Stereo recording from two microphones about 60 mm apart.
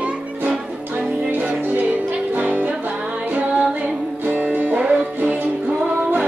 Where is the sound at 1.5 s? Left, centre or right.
Right.